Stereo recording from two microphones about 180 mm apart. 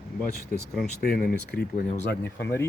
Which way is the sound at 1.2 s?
60° left (ahead or behind).